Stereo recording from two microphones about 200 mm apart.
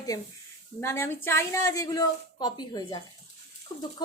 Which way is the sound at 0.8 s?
10° left (ahead or behind).